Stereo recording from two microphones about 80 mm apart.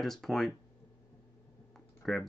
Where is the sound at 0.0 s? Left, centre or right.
Centre.